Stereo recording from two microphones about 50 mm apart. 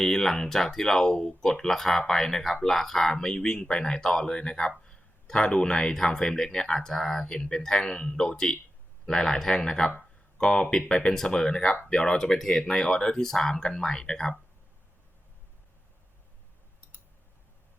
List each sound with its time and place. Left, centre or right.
0.0 s speech: centre